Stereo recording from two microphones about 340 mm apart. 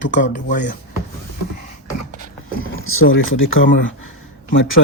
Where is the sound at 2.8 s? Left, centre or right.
Left.